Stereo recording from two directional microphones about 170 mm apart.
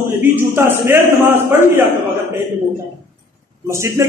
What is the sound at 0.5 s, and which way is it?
A man's voice, 15° right (ahead or behind).